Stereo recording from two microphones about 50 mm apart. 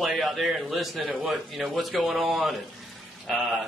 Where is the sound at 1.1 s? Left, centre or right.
Right.